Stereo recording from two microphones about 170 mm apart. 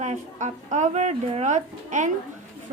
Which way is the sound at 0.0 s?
45° right (ahead or behind).